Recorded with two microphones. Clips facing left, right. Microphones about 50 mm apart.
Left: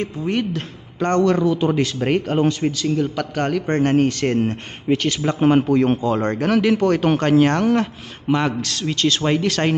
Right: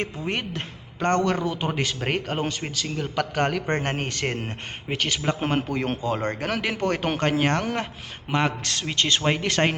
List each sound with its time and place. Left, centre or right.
0.3 s a woman's voice: right
0.9 s a man's voice: centre